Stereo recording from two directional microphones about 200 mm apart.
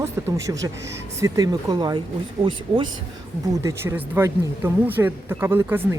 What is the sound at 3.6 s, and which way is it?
Speech, 10° right (ahead or behind).